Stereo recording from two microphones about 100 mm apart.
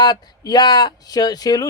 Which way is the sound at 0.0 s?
40° left (ahead or behind).